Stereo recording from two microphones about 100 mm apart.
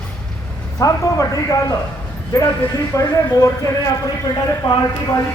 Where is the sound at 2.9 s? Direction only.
35° left (ahead or behind).